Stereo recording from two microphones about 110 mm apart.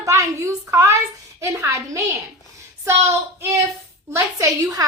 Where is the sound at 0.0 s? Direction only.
25° right (ahead or behind).